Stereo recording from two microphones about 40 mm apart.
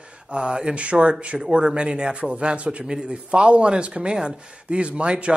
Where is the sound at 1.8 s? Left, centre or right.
Right.